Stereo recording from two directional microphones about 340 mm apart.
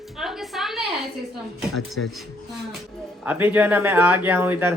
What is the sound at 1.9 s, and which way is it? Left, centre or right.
Speech, centre.